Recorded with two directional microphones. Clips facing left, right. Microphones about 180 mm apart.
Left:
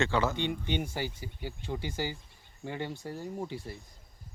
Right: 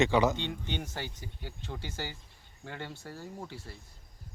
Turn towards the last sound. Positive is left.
turn(degrees=15)  # may be behind; listen again after turning